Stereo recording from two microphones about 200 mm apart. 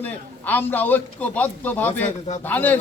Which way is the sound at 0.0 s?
10° left (ahead or behind).